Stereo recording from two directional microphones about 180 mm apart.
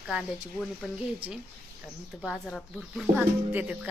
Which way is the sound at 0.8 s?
5° right (ahead or behind).